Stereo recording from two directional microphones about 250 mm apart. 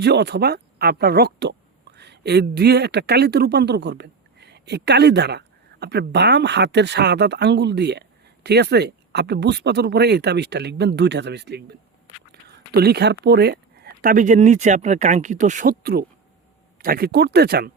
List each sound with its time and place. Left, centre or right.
0.0 s speech: right